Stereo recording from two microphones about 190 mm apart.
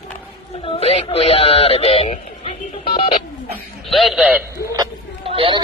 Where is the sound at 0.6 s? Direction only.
30° left (ahead or behind).